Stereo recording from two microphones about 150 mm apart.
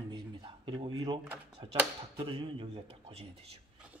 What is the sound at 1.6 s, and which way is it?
Speech, 35° right (ahead or behind).